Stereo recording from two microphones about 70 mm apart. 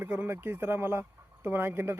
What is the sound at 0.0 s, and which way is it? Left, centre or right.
Speech, right.